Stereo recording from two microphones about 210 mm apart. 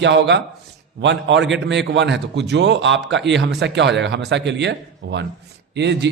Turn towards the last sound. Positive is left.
turn(degrees=-55)  # may be behind; listen again after turning